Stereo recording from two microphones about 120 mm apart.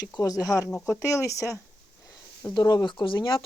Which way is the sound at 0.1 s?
30° left (ahead or behind).